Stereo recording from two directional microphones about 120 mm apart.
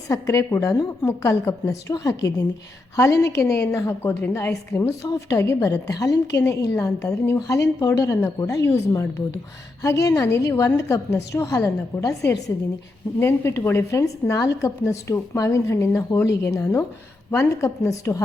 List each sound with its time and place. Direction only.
0.1 s a woman's voice: 25° left (ahead or behind)